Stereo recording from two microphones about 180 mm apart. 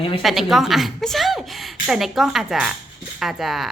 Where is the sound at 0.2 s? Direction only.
Centre (ahead or behind).